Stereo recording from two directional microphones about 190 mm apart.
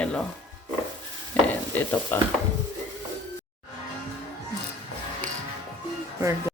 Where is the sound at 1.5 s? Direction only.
10° left (ahead or behind).